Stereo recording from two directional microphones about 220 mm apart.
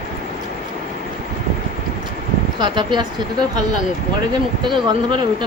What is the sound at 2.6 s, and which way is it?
Speech, 20° right (ahead or behind).